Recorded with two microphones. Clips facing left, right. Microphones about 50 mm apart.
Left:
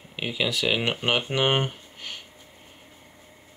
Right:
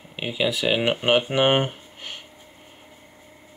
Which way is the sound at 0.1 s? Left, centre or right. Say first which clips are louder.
Right 3 dB; centre.